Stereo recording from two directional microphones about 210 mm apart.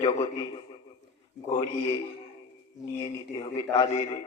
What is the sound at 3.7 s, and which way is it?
Speech, 20° left (ahead or behind).